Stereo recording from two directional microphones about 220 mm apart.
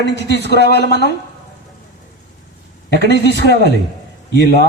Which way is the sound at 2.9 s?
50° right (ahead or behind).